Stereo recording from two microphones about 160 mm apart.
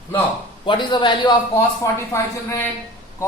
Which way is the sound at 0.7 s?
30° left (ahead or behind).